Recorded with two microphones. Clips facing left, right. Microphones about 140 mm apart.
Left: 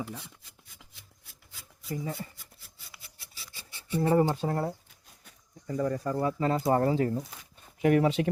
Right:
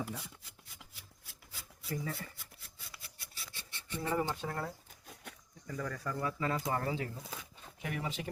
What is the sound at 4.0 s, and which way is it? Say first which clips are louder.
Speech: left 10 dB; 40° left (ahead or behind).